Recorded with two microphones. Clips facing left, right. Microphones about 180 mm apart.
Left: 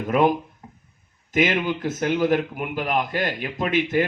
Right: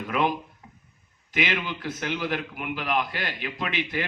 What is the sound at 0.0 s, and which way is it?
A man's voice, 45° left (ahead or behind).